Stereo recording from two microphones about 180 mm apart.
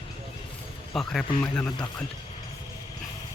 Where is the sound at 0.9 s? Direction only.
Centre (ahead or behind).